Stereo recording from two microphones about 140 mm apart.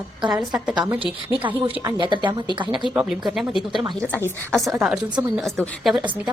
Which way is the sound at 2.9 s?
5° right (ahead or behind).